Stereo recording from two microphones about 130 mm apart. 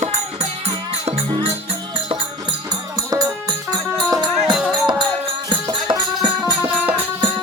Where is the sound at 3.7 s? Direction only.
30° right (ahead or behind).